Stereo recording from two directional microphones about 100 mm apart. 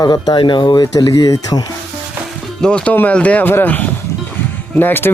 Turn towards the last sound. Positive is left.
turn(degrees=20)  # may be behind; listen again after turning